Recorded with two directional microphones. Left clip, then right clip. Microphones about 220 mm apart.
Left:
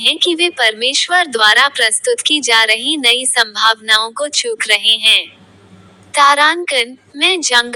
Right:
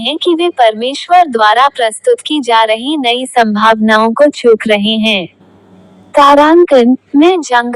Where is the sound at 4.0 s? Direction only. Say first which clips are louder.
Right 9 dB; 35° left (ahead or behind).